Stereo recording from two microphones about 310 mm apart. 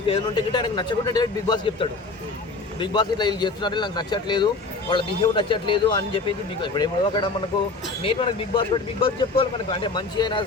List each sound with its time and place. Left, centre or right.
0.1 s speech: centre